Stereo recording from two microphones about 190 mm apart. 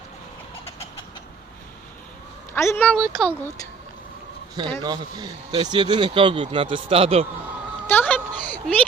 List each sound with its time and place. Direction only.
2.6 s speech: 10° left (ahead or behind)
4.8 s speech: 20° right (ahead or behind)
7.9 s a sound: 10° left (ahead or behind)